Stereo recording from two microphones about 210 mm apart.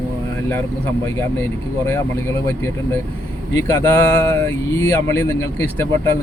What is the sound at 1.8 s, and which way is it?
Speech, 15° left (ahead or behind).